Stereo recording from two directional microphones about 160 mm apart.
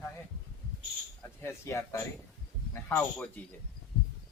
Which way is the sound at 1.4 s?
15° left (ahead or behind).